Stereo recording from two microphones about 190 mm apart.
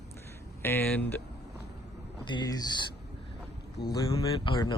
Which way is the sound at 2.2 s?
20° left (ahead or behind).